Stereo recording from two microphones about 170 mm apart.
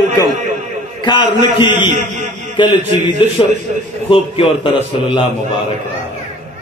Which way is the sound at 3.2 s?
30° left (ahead or behind).